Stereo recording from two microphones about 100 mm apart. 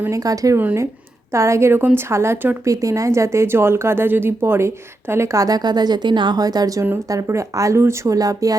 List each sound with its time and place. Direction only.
0.0 s speech: 35° right (ahead or behind)
0.6 s a woman's voice: 25° right (ahead or behind)
2.6 s speech: 35° right (ahead or behind)